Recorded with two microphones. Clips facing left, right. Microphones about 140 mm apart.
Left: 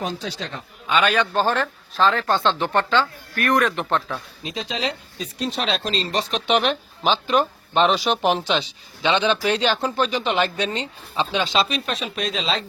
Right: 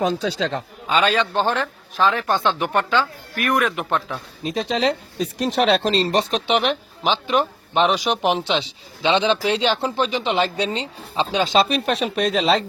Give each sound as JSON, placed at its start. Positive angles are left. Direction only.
{"t": 0.3, "sound": "a man's voice", "side_deg": -90}
{"t": 0.9, "sound": "speech", "side_deg": -30}
{"t": 4.4, "sound": "speech", "side_deg": -55}
{"t": 5.8, "sound": "speech", "side_deg": -35}
{"t": 6.5, "sound": "speech", "side_deg": -15}
{"t": 11.5, "sound": "speech", "side_deg": -55}